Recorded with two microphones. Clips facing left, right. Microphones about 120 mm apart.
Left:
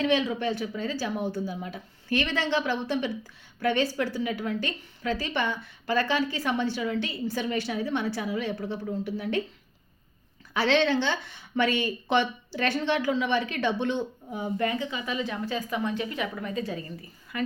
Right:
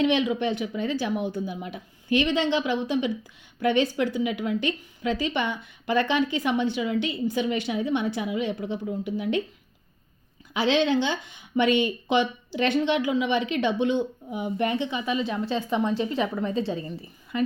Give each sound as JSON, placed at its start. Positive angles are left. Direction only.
{"t": 0.0, "sound": "a woman's voice", "side_deg": -20}
{"t": 10.5, "sound": "speech", "side_deg": -15}